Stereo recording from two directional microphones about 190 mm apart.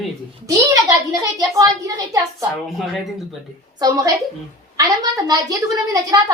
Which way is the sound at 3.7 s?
20° right (ahead or behind).